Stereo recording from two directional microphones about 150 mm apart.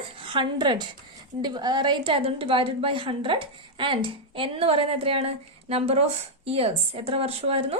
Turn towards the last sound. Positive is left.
turn(degrees=-40)  # may be behind; listen again after turning